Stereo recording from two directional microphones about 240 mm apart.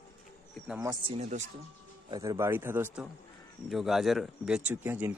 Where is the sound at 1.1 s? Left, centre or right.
Right.